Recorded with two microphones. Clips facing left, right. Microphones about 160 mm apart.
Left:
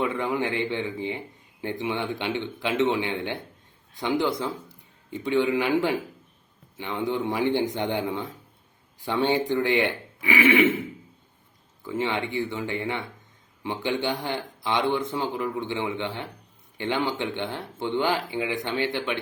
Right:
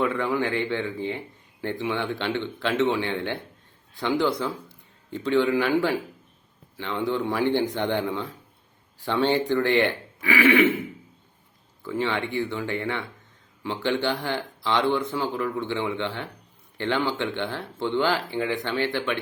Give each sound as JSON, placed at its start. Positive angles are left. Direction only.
{"t": 0.0, "sound": "a man's voice", "side_deg": 20}
{"t": 11.8, "sound": "speech", "side_deg": 15}